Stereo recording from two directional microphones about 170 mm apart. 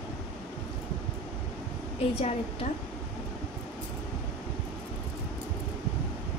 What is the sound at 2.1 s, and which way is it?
Speech, 40° left (ahead or behind).